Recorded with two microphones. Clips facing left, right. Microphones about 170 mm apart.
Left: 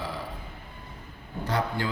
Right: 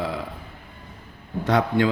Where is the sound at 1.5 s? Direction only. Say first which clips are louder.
Right 9 dB; 90° right.